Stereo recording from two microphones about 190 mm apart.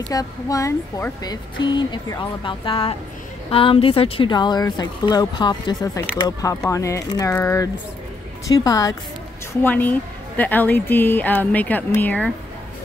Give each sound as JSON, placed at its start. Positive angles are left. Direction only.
{"t": 0.1, "sound": "a woman's voice", "side_deg": 20}